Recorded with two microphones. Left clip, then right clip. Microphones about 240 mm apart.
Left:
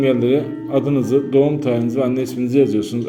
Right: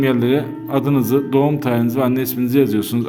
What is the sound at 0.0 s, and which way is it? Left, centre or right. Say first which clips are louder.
A man's voice: left 1 dB; right.